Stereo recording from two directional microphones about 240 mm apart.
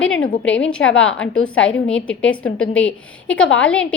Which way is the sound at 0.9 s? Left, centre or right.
Left.